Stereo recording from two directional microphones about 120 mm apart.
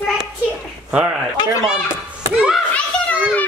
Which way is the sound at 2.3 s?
10° right (ahead or behind).